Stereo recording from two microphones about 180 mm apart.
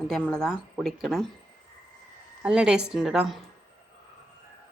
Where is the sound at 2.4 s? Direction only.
5° right (ahead or behind).